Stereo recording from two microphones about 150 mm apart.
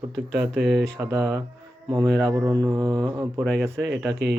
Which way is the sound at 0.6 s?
Centre (ahead or behind).